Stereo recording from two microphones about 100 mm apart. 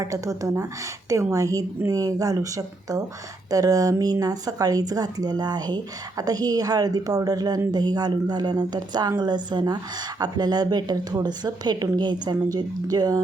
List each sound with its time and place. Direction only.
0.0 s speech: 35° right (ahead or behind)